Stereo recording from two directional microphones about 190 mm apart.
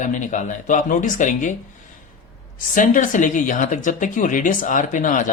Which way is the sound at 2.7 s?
45° left (ahead or behind).